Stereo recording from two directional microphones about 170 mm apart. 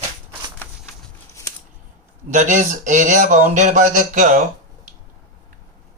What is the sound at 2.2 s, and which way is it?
Speech, 45° right (ahead or behind).